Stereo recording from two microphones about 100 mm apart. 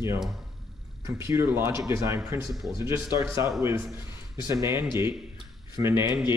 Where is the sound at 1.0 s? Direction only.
30° right (ahead or behind).